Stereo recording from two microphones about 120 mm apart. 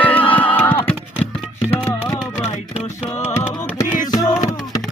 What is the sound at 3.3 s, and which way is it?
Music, 25° left (ahead or behind).